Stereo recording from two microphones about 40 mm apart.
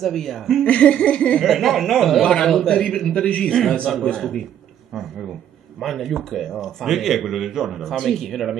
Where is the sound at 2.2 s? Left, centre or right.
Centre.